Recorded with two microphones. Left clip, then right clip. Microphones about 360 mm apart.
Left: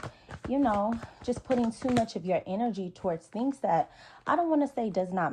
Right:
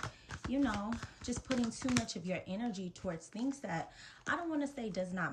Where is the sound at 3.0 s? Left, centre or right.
Left.